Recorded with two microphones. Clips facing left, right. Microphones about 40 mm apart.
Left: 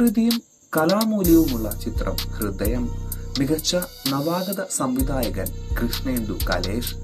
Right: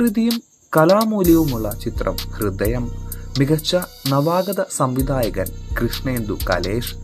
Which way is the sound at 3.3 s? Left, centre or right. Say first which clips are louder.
Right 4 dB; centre.